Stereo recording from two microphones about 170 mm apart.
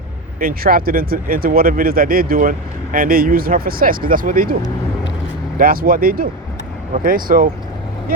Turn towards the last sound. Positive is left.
turn(degrees=-55)  # may be behind; listen again after turning